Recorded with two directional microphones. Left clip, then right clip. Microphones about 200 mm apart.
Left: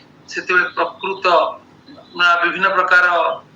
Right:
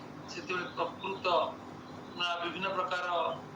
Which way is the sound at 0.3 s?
40° left (ahead or behind).